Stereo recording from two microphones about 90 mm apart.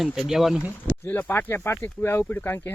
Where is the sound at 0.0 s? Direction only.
5° right (ahead or behind).